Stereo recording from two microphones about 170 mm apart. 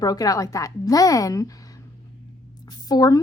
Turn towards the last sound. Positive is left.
turn(degrees=20)  # may be behind; listen again after turning